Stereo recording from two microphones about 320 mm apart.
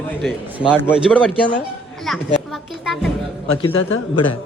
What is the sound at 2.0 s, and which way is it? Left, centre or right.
Music, centre.